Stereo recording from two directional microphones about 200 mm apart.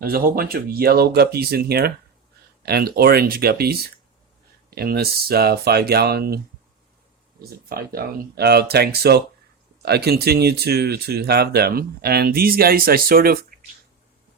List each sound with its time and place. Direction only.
0.0 s speech: 50° right (ahead or behind)
7.7 s speech: 50° right (ahead or behind)